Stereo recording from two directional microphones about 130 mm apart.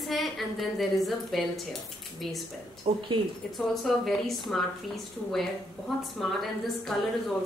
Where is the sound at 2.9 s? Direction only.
45° right (ahead or behind).